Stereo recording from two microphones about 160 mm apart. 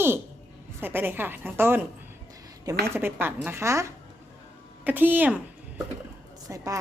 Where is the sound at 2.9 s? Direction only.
15° right (ahead or behind).